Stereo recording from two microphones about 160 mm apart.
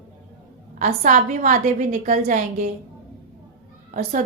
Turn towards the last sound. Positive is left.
turn(degrees=-55)  # may be behind; listen again after turning